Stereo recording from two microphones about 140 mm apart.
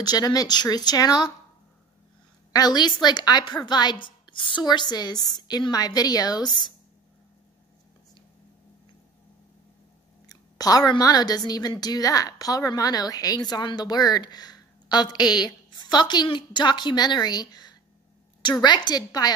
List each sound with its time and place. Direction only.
0.0 s a woman's voice: 25° left (ahead or behind)
2.5 s a woman's voice: 30° left (ahead or behind)
10.2 s a woman's voice: 25° left (ahead or behind)